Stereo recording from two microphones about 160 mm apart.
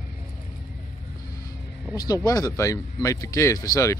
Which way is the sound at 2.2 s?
20° left (ahead or behind).